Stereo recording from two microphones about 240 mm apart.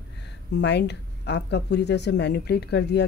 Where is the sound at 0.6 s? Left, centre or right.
Left.